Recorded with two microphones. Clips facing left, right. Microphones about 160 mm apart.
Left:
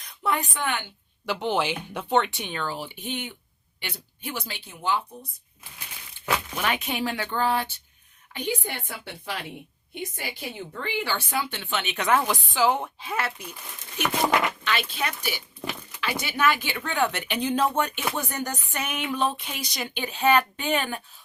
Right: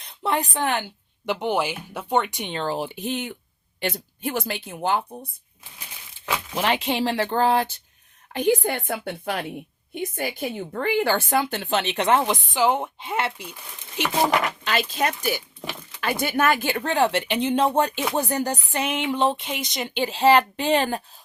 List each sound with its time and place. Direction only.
0.0 s speech: 30° right (ahead or behind)
1.2 s speech: 15° right (ahead or behind)
2.5 s speech: 30° right (ahead or behind)
2.7 s speech: 40° right (ahead or behind)
6.6 s speech: 30° right (ahead or behind)
14.6 s speech: 40° right (ahead or behind)